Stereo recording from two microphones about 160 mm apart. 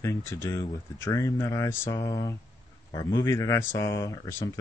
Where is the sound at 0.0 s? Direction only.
15° left (ahead or behind).